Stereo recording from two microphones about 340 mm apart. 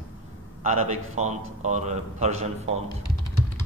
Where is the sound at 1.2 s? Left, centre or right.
Right.